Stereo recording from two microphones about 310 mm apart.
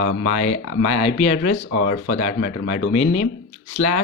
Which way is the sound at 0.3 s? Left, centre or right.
Left.